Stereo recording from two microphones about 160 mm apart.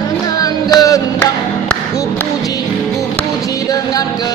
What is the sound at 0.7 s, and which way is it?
Music, 20° left (ahead or behind).